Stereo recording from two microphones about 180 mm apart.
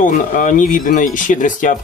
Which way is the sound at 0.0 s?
50° left (ahead or behind).